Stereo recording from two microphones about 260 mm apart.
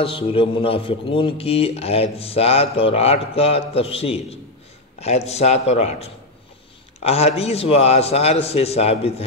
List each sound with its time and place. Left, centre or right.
0.0 s speech: left